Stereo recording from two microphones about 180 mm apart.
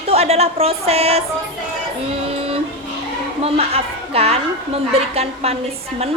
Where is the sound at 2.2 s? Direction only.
35° right (ahead or behind).